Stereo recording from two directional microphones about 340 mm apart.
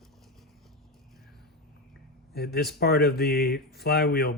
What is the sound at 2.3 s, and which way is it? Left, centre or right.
Speech, left.